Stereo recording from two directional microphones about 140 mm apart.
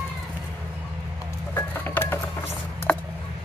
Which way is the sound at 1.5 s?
15° left (ahead or behind).